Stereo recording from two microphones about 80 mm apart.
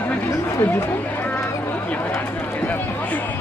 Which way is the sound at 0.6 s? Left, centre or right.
Left.